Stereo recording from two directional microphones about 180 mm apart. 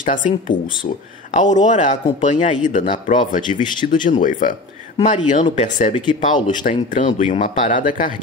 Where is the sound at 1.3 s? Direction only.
45° left (ahead or behind).